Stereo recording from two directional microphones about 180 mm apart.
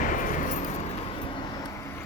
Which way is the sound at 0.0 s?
45° left (ahead or behind).